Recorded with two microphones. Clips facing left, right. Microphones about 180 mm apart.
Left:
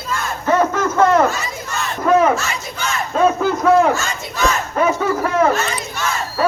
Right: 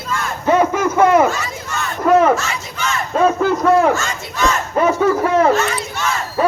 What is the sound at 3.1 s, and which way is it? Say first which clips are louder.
Speech: right 1 dB; centre (ahead or behind).